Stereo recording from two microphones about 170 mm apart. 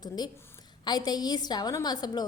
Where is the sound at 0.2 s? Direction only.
25° left (ahead or behind).